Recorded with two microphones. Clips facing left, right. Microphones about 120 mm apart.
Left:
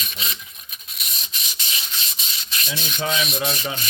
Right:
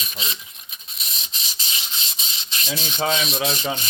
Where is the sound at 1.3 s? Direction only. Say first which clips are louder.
Even; 30° right (ahead or behind).